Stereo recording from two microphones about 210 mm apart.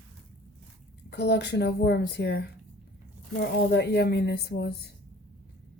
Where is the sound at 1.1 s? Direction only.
55° left (ahead or behind).